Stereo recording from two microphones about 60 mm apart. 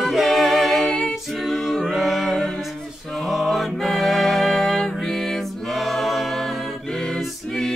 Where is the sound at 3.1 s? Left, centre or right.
Centre.